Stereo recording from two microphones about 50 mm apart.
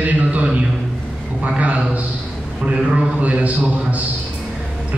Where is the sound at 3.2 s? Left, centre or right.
Right.